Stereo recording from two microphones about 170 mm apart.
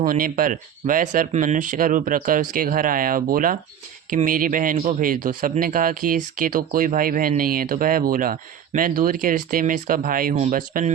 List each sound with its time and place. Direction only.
0.0 s speech: 55° right (ahead or behind)